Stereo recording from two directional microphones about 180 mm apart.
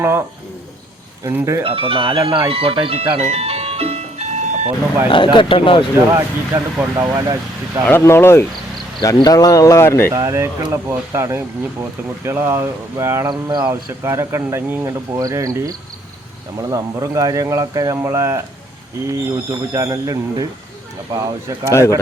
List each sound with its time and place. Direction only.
0.0 s speech: 15° right (ahead or behind)
1.6 s speech: 30° right (ahead or behind)
2.5 s music: 30° right (ahead or behind)
5.0 s speech: 30° left (ahead or behind)
6.5 s speech: 15° right (ahead or behind)
7.9 s speech: 15° left (ahead or behind)
10.1 s speech: 15° right (ahead or behind)
13.7 s speech: 15° right (ahead or behind)
21.7 s speech: 15° left (ahead or behind)